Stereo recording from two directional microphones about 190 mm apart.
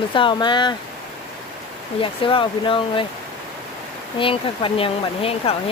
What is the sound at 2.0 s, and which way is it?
Speech, 25° left (ahead or behind).